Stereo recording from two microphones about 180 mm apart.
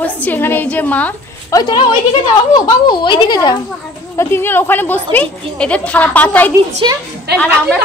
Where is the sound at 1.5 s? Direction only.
25° left (ahead or behind); by 6.5 s 10° left (ahead or behind).